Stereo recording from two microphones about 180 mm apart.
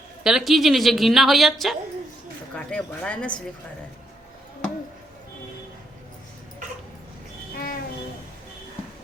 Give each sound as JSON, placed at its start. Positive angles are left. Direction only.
{"t": 0.2, "sound": "a woman's voice", "side_deg": -5}
{"t": 7.5, "sound": "music", "side_deg": 50}